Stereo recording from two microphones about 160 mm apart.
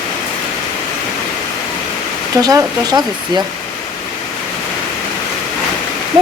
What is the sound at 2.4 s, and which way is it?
Speech, 25° right (ahead or behind).